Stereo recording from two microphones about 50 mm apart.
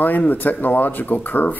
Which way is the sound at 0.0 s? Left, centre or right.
Left.